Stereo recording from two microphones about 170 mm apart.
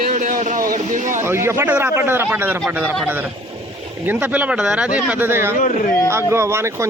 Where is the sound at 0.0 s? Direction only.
50° right (ahead or behind).